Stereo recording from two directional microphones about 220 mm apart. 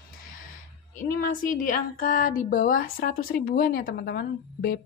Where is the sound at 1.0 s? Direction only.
40° left (ahead or behind).